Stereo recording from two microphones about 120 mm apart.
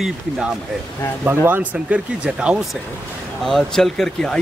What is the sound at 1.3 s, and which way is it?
A man's voice, 15° right (ahead or behind).